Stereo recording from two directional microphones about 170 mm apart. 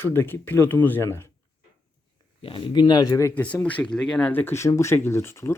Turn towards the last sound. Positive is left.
turn(degrees=15)  # may be behind; listen again after turning